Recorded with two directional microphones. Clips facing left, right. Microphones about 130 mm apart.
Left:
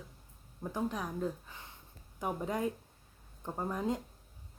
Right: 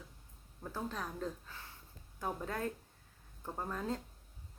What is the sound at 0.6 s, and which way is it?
Speech, 15° left (ahead or behind).